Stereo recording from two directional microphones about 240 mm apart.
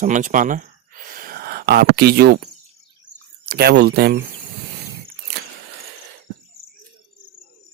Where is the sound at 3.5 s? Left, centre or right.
Right.